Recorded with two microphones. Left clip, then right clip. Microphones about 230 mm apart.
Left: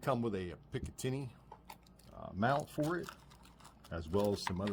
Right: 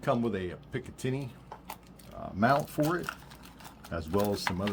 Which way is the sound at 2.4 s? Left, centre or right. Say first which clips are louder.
Right 8 dB; left.